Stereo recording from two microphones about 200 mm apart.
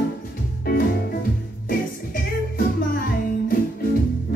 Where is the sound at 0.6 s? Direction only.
45° left (ahead or behind).